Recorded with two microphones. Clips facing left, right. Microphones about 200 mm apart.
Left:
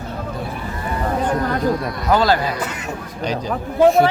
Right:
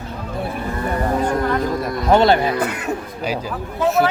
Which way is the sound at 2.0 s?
25° right (ahead or behind).